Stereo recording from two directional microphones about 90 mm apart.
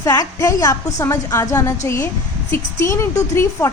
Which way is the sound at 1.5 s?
25° left (ahead or behind).